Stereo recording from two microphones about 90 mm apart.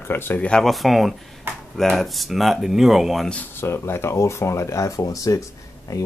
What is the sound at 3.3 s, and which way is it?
Speech, 20° left (ahead or behind).